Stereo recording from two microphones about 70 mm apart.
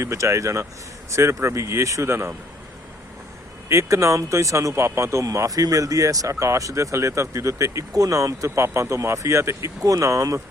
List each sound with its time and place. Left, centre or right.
0.0 s speech: right
3.7 s speech: right
5.2 s speech: right